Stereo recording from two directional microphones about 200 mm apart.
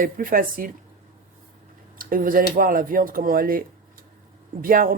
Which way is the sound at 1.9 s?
45° right (ahead or behind).